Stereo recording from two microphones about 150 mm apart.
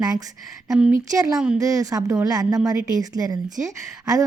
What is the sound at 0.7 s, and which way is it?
Speech, 5° right (ahead or behind).